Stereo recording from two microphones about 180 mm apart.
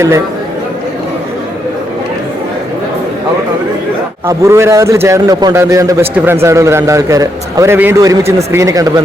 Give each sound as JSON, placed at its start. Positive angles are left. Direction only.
{"t": 4.3, "sound": "a man's voice", "side_deg": -15}